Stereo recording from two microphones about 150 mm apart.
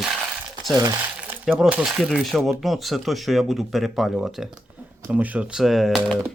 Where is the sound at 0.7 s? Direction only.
25° right (ahead or behind).